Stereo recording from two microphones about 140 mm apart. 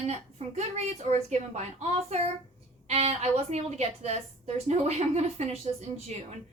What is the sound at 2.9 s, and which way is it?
Speech, 50° right (ahead or behind).